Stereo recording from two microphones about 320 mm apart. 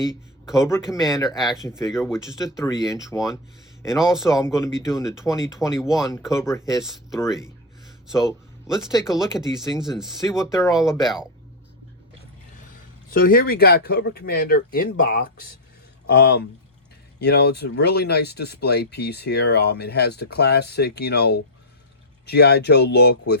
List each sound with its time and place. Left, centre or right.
0.1 s a man's voice: centre
1.1 s speech: centre
2.0 s speech: centre
2.6 s speech: centre
3.2 s speech: centre
5.9 s speech: centre
8.0 s speech: centre
10.4 s speech: centre
10.8 s speech: centre
13.2 s speech: left